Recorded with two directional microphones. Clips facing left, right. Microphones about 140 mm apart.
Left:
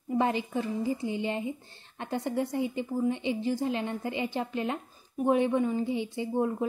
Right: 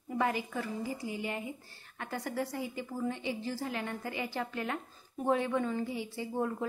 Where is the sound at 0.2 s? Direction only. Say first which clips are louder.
Left 3 dB; 25° left (ahead or behind).